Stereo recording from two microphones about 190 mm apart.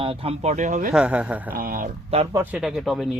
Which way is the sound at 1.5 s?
50° right (ahead or behind).